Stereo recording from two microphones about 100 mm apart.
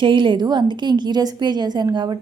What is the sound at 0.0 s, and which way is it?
A woman's voice, 55° right (ahead or behind).